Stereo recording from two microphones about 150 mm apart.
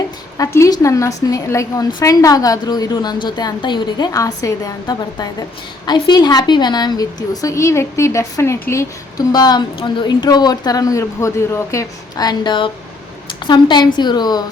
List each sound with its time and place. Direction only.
0.3 s a woman's voice: 20° left (ahead or behind)